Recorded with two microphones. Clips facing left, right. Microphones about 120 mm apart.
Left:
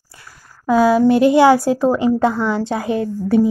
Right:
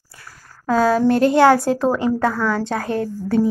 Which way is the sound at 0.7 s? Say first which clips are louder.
Left 3 dB; 10° left (ahead or behind).